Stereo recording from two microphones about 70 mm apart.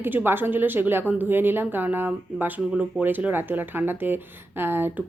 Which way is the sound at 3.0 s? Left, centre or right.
Right.